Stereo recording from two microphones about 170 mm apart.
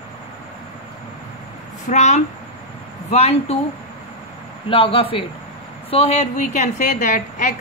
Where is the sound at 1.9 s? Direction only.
40° left (ahead or behind).